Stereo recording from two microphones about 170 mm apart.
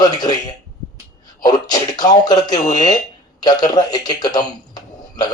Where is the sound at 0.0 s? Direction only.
25° left (ahead or behind).